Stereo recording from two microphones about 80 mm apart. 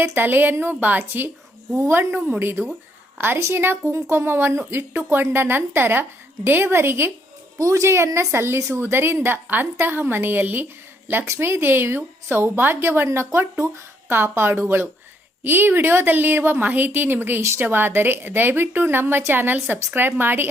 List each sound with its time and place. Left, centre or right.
0.0 s a woman's voice: right